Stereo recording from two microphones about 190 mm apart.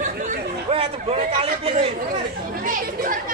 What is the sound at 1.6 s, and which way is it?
Speech, 30° right (ahead or behind).